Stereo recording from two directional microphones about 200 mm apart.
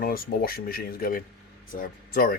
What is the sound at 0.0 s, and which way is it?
Speech, 45° left (ahead or behind).